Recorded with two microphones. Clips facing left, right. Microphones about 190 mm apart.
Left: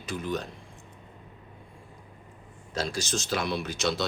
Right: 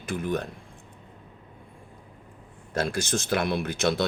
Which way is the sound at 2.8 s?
55° right (ahead or behind).